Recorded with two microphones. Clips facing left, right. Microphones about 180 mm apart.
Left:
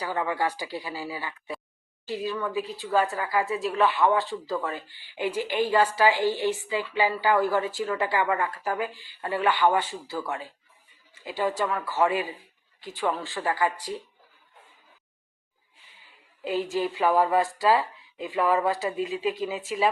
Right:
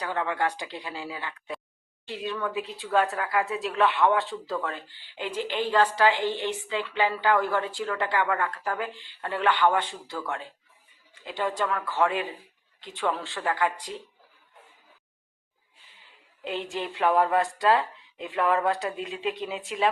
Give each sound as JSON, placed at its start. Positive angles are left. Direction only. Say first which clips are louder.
{"t": 0.0, "sound": "a woman's voice", "louder": "left 1 dB", "side_deg": 5}
{"t": 16.4, "sound": "a woman's voice", "louder": "left 5 dB", "side_deg": 5}